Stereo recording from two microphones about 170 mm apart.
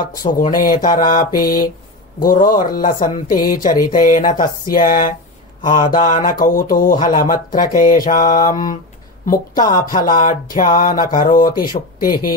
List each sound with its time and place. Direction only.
0.3 s speech: 55° left (ahead or behind)